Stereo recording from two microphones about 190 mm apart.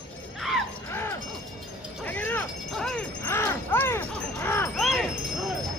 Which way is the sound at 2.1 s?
10° left (ahead or behind).